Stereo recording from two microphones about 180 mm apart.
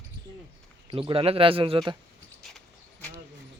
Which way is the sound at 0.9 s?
30° right (ahead or behind).